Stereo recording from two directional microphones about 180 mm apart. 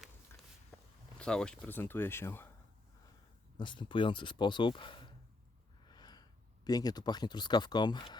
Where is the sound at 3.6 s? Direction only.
25° left (ahead or behind).